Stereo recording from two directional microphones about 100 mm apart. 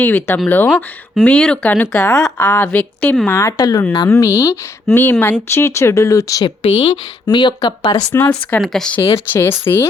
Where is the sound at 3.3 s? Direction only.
30° left (ahead or behind).